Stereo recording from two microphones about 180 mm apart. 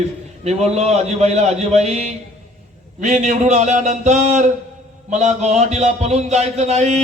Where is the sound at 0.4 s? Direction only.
35° right (ahead or behind).